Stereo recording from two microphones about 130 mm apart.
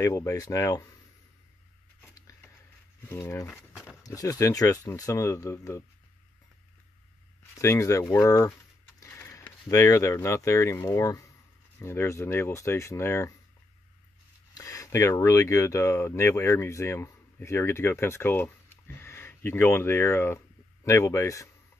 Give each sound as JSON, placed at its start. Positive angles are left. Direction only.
{"t": 0.0, "sound": "speech", "side_deg": 25}
{"t": 2.0, "sound": "a sound", "side_deg": 25}
{"t": 3.0, "sound": "speech", "side_deg": 20}
{"t": 7.5, "sound": "speech", "side_deg": 20}
{"t": 14.5, "sound": "speech", "side_deg": 25}